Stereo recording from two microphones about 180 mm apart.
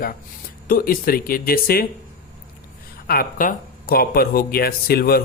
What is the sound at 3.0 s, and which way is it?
Speech, 55° left (ahead or behind).